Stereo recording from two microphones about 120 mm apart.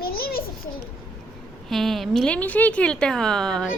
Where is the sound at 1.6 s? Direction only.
Centre (ahead or behind).